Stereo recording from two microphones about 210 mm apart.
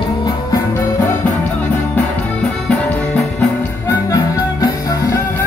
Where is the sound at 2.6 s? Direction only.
5° left (ahead or behind).